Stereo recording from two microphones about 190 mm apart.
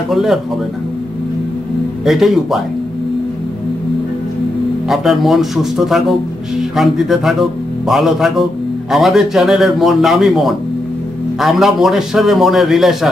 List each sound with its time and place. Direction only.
0.1 s a man's voice: centre (ahead or behind)
2.0 s a man's voice: centre (ahead or behind)
4.8 s a man's voice: centre (ahead or behind)